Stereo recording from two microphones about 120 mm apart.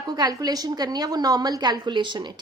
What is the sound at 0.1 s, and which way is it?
A woman's voice, 35° right (ahead or behind).